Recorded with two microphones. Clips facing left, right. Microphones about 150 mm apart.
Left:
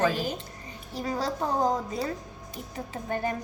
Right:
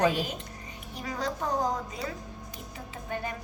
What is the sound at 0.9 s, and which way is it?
A woman's voice, 30° left (ahead or behind).